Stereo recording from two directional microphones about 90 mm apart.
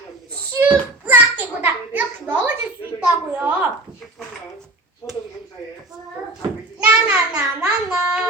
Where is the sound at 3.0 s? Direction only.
20° right (ahead or behind).